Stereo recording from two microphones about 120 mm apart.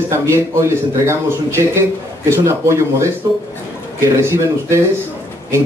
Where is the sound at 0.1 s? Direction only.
20° right (ahead or behind).